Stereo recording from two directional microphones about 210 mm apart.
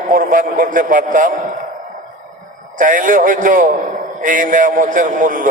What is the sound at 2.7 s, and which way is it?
A man's voice, 40° right (ahead or behind).